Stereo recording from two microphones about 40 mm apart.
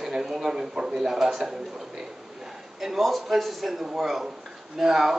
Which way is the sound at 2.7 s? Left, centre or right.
Centre.